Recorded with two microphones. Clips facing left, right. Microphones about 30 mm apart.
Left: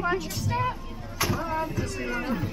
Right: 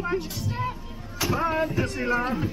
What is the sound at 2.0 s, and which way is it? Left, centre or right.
Speech, centre.